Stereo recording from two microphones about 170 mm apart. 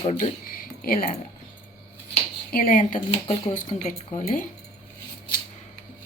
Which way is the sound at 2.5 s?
55° left (ahead or behind).